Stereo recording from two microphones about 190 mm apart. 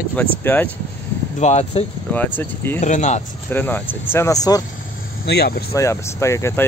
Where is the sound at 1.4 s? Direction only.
35° left (ahead or behind).